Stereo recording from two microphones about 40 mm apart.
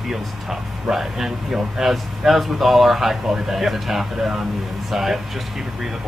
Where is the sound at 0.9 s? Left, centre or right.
Centre.